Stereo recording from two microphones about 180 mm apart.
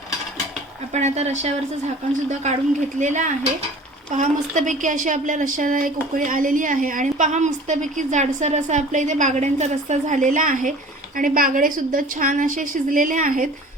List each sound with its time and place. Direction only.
0.9 s speech: 40° right (ahead or behind)
3.0 s a woman's voice: 40° right (ahead or behind)